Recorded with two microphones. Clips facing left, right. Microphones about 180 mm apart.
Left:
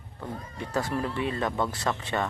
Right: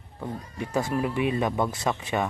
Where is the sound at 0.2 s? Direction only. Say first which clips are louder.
Right 3 dB; 10° right (ahead or behind).